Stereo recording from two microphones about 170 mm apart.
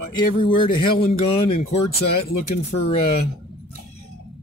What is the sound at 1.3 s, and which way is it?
Speech, 35° left (ahead or behind).